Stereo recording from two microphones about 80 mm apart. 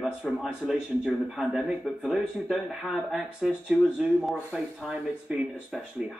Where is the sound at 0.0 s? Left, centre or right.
Centre.